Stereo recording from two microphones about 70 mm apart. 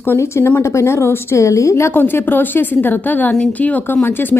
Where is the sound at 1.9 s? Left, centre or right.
Left.